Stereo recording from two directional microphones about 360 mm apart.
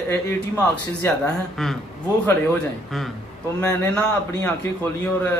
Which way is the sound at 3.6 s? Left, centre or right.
Centre.